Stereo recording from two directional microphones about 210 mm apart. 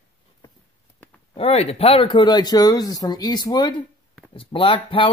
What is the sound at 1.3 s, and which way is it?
Speech, 30° left (ahead or behind).